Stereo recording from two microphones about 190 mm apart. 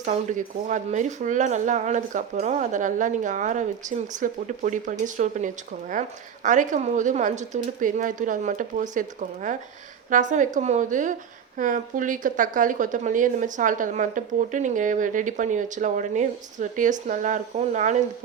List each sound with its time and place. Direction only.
0.0 s a woman's voice: 40° right (ahead or behind)